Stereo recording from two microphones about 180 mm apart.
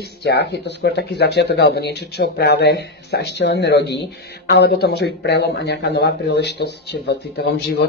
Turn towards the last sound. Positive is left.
turn(degrees=70)  # may be behind; listen again after turning